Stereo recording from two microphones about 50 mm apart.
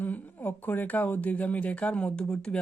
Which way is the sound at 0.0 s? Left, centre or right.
Left.